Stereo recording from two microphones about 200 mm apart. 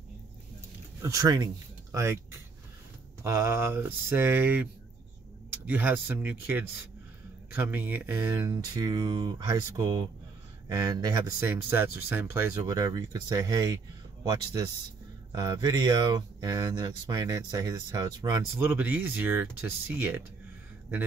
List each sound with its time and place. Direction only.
1.0 s speech: 20° right (ahead or behind)
3.3 s speech: 15° right (ahead or behind)